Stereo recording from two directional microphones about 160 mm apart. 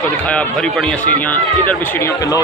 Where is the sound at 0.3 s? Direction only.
5° left (ahead or behind).